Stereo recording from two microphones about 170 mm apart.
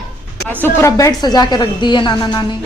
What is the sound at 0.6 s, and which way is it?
A woman's voice, 15° left (ahead or behind).